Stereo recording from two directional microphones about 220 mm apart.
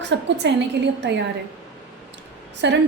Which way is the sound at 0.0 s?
55° right (ahead or behind).